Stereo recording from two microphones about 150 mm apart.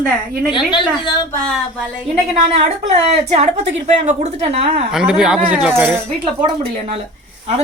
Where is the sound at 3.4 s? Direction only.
50° right (ahead or behind).